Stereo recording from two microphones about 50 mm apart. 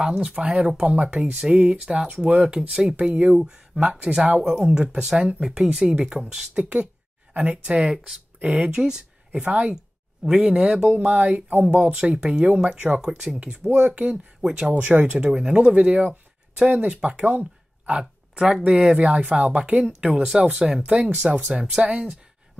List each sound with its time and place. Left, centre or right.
0.0 s speech: centre
2.7 s speech: centre
3.0 s speech: right
3.3 s speech: centre
8.6 s speech: centre
9.4 s speech: right
10.2 s speech: centre
10.9 s speech: right
14.7 s speech: right
15.2 s speech: centre
17.3 s a sound: right
18.6 s speech: centre
20.4 s speech: centre